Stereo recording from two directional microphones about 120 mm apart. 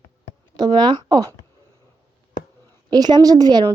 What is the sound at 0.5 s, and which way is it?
Speech, 35° right (ahead or behind).